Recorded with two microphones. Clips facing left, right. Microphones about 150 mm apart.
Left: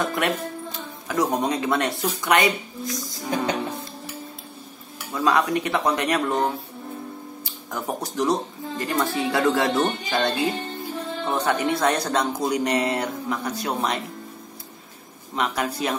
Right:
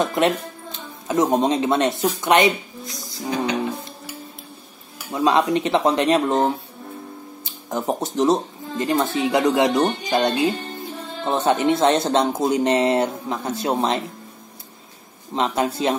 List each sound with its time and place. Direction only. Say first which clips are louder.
0.0 s speech: right 4 dB; 20° right (ahead or behind)
5.1 s speech: right 3 dB; 20° right (ahead or behind)
15.3 s speech: right 4 dB; 25° right (ahead or behind)